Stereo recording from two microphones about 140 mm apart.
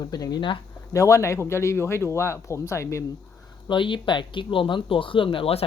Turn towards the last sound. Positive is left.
turn(degrees=40)  # may be behind; listen again after turning